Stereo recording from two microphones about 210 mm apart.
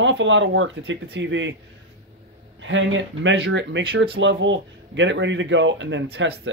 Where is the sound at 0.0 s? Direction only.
60° right (ahead or behind).